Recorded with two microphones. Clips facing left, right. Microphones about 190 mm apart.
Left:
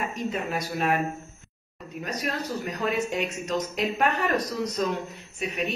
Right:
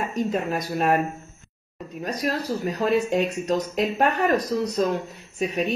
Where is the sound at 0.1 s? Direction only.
40° right (ahead or behind).